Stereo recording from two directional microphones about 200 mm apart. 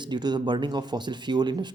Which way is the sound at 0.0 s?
20° right (ahead or behind).